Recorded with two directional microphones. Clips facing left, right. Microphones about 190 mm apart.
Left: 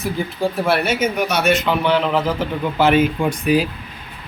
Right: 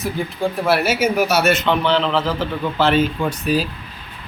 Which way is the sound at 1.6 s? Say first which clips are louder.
Even; 10° left (ahead or behind).